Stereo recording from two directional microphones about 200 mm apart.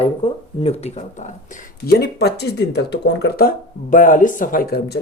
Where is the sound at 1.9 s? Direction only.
55° left (ahead or behind).